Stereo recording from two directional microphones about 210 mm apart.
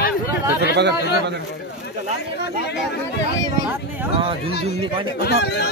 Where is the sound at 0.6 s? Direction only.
55° right (ahead or behind).